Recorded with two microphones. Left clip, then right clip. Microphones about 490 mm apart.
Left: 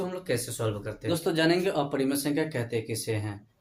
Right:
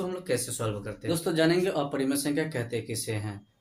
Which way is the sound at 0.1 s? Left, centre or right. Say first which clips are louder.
Right 1 dB; left.